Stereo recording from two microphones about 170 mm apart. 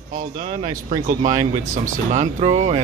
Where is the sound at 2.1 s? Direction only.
40° right (ahead or behind).